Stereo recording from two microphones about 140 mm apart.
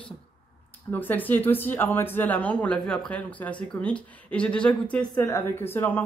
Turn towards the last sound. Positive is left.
turn(degrees=15)  # may be behind; listen again after turning